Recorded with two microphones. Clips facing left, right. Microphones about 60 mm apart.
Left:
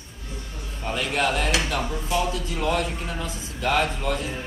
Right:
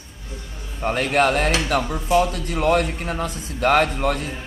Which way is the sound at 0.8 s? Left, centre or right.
Right.